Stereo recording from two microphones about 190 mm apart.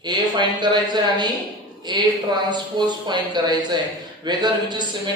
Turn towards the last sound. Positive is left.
turn(degrees=-20)  # may be behind; listen again after turning